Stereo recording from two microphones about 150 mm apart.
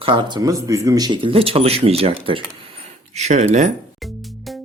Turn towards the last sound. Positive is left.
turn(degrees=-55)  # may be behind; listen again after turning